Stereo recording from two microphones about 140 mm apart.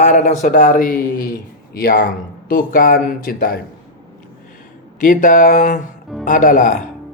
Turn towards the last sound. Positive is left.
turn(degrees=70)  # may be behind; listen again after turning